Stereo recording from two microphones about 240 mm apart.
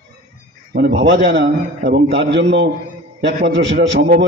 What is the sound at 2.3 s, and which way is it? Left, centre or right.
A man's voice, right.